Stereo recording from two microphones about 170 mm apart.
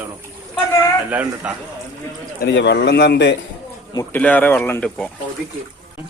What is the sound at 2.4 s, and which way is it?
Speech, 85° left.